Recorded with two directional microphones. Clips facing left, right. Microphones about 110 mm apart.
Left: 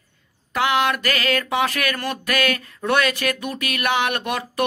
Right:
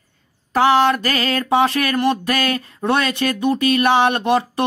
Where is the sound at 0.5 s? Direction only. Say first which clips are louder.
Right 6 dB; 35° right (ahead or behind).